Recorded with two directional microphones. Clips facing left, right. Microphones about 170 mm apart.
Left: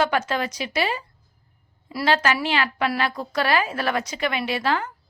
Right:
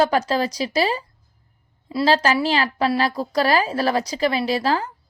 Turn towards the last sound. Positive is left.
turn(degrees=-35)  # may be behind; listen again after turning